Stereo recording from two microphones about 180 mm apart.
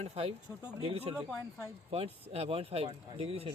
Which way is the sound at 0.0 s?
35° right (ahead or behind).